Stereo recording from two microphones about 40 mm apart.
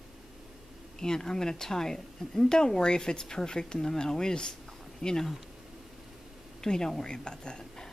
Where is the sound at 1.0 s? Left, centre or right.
Centre.